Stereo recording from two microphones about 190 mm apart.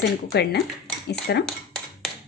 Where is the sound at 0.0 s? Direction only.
60° left (ahead or behind).